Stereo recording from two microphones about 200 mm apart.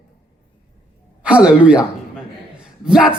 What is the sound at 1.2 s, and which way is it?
Speech, 5° right (ahead or behind).